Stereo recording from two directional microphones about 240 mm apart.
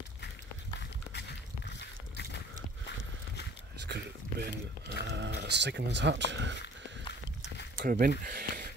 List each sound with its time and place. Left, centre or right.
0.7 s a sound: left
3.8 s speech: right
7.7 s speech: right